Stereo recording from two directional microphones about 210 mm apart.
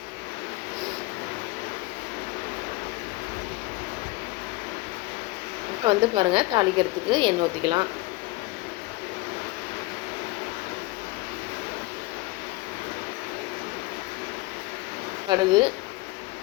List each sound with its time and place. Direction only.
5.8 s a woman's voice: 20° right (ahead or behind)
15.3 s a woman's voice: 20° right (ahead or behind)